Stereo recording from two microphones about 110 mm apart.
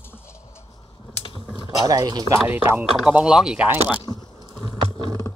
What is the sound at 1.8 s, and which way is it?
Speech, 35° right (ahead or behind).